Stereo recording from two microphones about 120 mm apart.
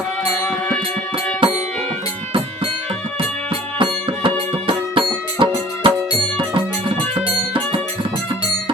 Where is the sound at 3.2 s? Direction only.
50° right (ahead or behind).